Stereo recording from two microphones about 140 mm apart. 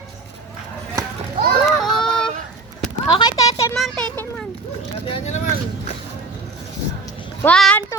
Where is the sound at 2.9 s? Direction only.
30° left (ahead or behind).